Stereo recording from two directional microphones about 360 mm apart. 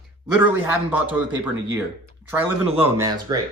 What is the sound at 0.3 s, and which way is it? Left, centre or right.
Speech, centre.